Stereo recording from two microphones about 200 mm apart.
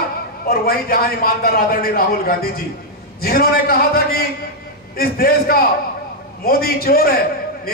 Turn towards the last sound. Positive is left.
turn(degrees=50)  # may be behind; listen again after turning